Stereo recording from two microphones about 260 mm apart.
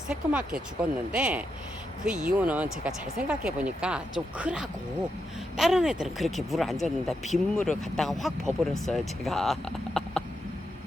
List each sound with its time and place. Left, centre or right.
0.1 s speech: centre